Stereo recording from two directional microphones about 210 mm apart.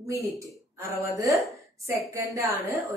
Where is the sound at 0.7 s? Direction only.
15° right (ahead or behind).